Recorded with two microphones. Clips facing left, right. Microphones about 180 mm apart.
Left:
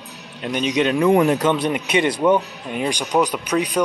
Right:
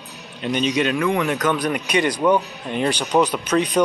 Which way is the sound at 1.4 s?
25° left (ahead or behind).